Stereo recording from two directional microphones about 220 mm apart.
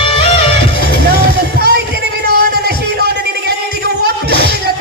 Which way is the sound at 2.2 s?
45° right (ahead or behind).